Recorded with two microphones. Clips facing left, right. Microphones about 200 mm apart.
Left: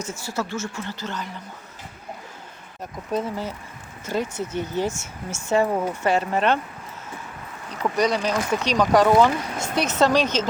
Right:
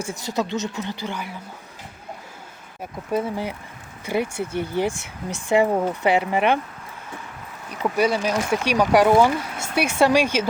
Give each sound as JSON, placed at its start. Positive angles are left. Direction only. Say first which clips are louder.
{"t": 0.0, "sound": "speech", "louder": "right 3 dB", "side_deg": -15}
{"t": 3.1, "sound": "speech", "louder": "right 2 dB", "side_deg": -10}
{"t": 7.7, "sound": "speech", "louder": "right 1 dB", "side_deg": -10}